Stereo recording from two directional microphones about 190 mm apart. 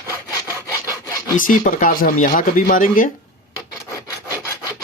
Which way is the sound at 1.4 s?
45° left (ahead or behind).